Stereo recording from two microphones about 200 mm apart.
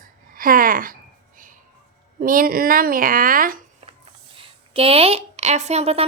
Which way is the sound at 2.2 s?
45° right (ahead or behind).